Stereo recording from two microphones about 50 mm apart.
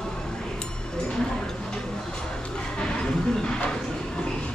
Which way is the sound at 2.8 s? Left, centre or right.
Centre.